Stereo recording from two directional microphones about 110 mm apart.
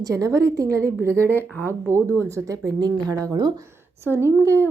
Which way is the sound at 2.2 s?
30° right (ahead or behind).